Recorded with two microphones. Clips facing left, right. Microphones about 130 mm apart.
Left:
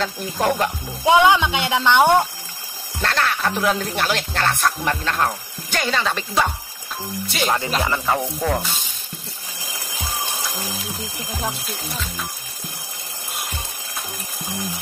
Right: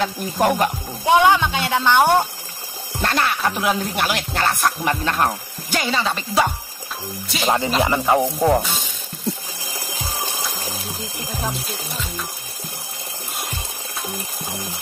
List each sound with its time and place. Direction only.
1.0 s speech: 15° left (ahead or behind)
3.0 s speech: 15° right (ahead or behind)
5.7 s speech: 5° right (ahead or behind)
7.4 s speech: 20° right (ahead or behind)